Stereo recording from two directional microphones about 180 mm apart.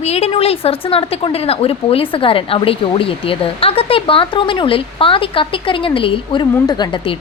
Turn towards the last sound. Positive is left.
turn(degrees=25)  # may be behind; listen again after turning